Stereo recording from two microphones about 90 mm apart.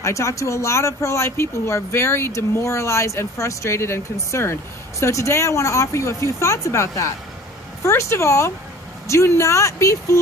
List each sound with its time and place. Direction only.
0.0 s speech: 35° left (ahead or behind)